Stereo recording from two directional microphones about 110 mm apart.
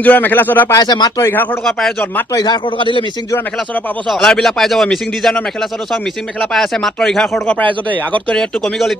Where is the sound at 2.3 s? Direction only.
45° left (ahead or behind).